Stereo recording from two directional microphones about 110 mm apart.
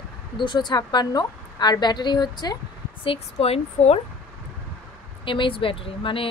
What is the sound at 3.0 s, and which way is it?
A woman's voice, 60° left (ahead or behind).